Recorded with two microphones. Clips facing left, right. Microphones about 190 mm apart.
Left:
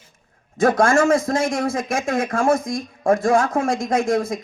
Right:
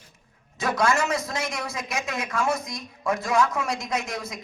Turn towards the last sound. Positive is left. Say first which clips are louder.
# left 11 dB
turn(degrees=50)  # may be behind; listen again after turning